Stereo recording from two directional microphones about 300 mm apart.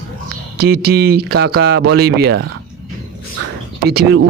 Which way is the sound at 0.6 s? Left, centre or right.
Right.